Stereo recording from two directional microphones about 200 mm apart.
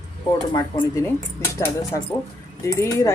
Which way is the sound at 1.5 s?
10° left (ahead or behind).